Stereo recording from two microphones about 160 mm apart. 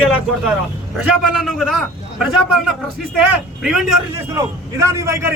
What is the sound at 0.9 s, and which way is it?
A man's voice, centre (ahead or behind).